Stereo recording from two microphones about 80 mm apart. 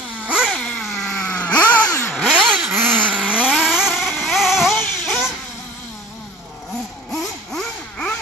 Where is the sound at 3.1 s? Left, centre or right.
Centre.